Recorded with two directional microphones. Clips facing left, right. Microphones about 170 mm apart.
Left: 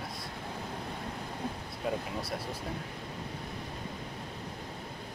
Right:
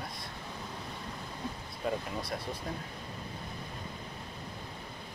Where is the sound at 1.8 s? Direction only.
5° left (ahead or behind).